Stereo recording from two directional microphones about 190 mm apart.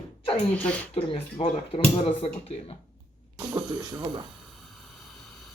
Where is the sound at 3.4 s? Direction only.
20° right (ahead or behind).